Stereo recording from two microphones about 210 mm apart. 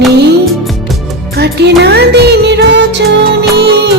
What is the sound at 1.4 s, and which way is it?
Music, 55° right (ahead or behind).